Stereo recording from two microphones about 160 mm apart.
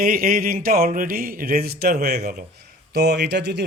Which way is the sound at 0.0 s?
65° right (ahead or behind).